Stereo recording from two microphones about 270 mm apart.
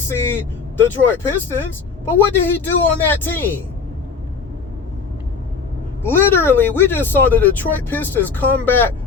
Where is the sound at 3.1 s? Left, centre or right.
Centre.